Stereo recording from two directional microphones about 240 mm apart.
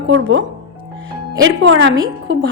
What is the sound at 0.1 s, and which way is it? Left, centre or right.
Speech, right.